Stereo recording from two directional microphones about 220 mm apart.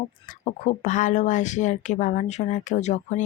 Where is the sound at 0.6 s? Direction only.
35° left (ahead or behind).